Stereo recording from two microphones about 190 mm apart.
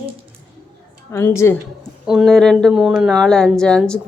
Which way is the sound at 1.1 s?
15° left (ahead or behind).